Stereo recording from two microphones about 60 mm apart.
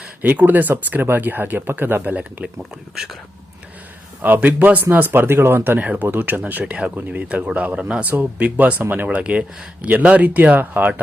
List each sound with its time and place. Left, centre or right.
0.2 s speech: right
2.9 s speech: centre
4.2 s speech: right
5.8 s speech: right